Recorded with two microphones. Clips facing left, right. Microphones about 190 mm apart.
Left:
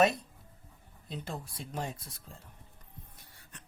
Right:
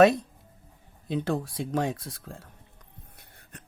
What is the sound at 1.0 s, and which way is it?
Speech, 85° right.